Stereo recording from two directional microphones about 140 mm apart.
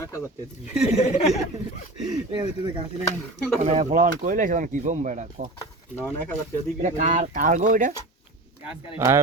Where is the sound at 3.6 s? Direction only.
55° right (ahead or behind).